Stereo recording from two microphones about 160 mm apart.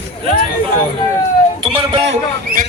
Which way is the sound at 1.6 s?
30° right (ahead or behind).